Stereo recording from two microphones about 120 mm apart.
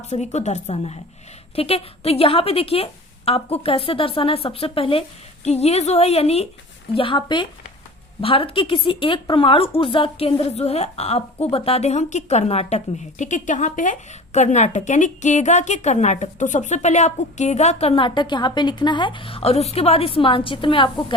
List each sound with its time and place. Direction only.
0.0 s a woman's voice: 70° left (ahead or behind)
6.9 s a woman's voice: 45° left (ahead or behind)